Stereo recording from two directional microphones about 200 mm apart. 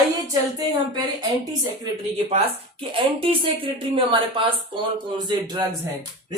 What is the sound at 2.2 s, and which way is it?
A man's voice, 25° right (ahead or behind).